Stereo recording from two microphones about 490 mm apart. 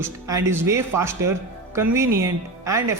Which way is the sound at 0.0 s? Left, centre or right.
Centre.